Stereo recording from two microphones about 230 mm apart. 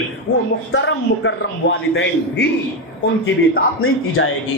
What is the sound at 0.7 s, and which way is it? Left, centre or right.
Speech, left.